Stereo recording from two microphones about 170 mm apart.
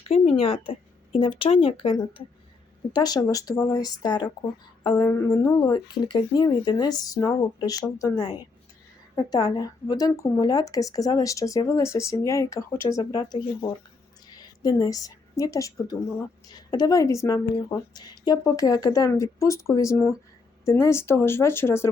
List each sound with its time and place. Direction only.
0.1 s a woman's voice: 35° left (ahead or behind)
14.3 s a woman's voice: 20° left (ahead or behind)